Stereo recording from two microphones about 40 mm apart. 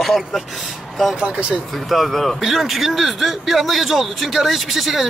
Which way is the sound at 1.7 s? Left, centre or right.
Centre.